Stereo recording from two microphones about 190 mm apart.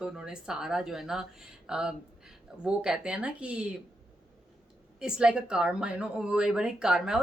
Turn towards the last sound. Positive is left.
turn(degrees=-5)  # may be behind; listen again after turning